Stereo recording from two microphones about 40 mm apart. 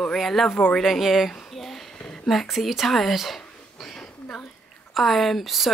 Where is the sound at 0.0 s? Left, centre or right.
Centre.